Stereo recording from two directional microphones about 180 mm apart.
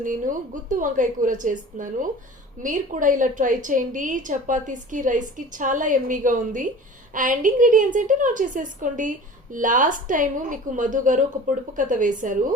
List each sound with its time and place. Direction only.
0.0 s a woman's voice: 45° right (ahead or behind)